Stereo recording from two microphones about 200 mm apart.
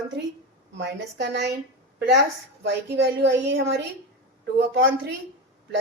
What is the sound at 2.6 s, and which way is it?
A woman's voice, 60° right (ahead or behind).